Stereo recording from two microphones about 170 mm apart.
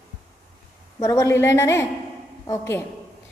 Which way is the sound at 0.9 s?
15° left (ahead or behind).